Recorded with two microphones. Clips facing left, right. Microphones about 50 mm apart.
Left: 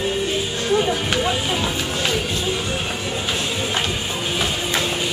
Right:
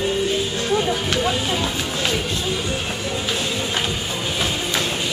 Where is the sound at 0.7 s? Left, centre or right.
Centre.